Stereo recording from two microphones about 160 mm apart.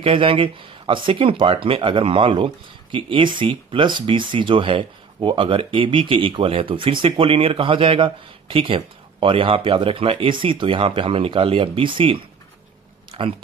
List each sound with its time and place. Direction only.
0.0 s speech: 35° right (ahead or behind)